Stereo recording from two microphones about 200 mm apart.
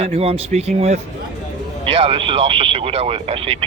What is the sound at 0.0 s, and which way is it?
Speech, 30° right (ahead or behind).